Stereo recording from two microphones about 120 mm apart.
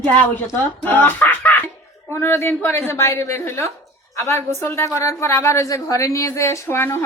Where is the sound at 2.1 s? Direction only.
20° left (ahead or behind).